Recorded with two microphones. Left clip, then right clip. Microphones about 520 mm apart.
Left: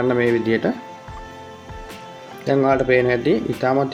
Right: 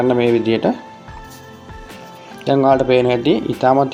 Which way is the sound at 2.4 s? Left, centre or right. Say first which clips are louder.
Right 4 dB; left.